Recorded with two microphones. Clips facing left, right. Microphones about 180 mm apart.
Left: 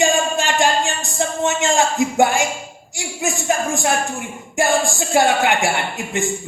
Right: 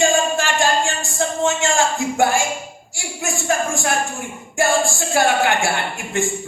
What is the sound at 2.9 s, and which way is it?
Speech, 20° left (ahead or behind).